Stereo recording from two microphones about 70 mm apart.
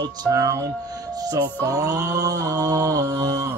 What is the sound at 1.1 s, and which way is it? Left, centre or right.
Mantra, right.